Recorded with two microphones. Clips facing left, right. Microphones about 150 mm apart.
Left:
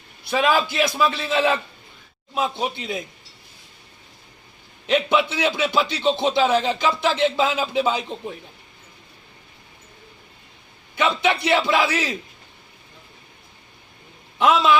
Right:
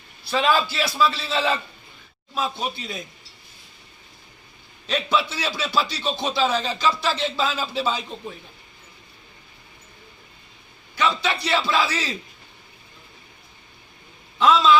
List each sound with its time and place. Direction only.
0.3 s a man's voice: 15° left (ahead or behind)
4.9 s a man's voice: 20° left (ahead or behind)
10.9 s a man's voice: 20° left (ahead or behind)
14.3 s speech: 20° left (ahead or behind)